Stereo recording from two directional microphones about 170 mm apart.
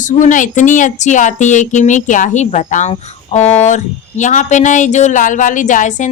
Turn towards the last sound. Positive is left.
turn(degrees=45)  # may be behind; listen again after turning